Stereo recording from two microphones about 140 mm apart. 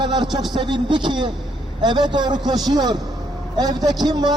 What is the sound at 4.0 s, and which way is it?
Speech, 30° right (ahead or behind).